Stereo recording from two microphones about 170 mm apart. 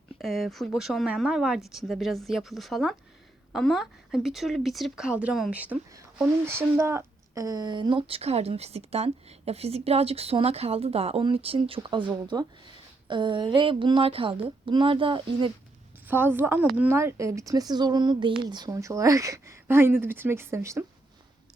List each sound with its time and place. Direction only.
0.2 s a woman's voice: centre (ahead or behind); by 15.5 s 30° right (ahead or behind)
16.0 s speech: 10° right (ahead or behind)